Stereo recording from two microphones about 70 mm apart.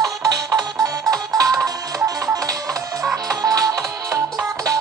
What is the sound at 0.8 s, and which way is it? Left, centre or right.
Music, right.